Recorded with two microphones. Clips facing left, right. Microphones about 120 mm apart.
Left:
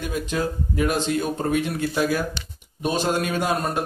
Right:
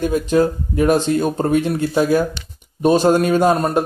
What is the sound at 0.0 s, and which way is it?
A man's voice, 40° right (ahead or behind).